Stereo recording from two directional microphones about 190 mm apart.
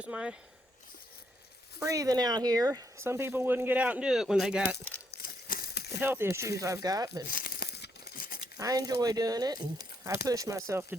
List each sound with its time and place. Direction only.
0.0 s speech: 5° right (ahead or behind)
1.8 s speech: 20° right (ahead or behind)
5.1 s crumpling: 50° left (ahead or behind)
5.9 s speech: 10° right (ahead or behind)
7.3 s tearing: 55° left (ahead or behind)
8.5 s speech: 20° right (ahead or behind)